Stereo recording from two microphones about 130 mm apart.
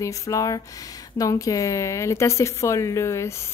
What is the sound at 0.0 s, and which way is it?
A woman's voice, 25° left (ahead or behind).